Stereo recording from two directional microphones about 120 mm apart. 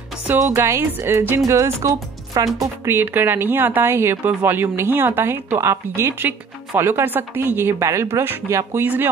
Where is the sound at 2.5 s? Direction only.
20° right (ahead or behind).